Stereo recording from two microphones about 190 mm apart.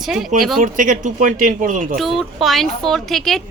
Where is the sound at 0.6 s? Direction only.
40° right (ahead or behind).